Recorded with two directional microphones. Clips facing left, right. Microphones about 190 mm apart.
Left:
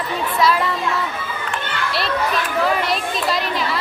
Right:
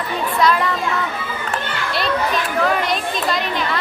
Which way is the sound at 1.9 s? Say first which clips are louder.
Right 2 dB; centre (ahead or behind).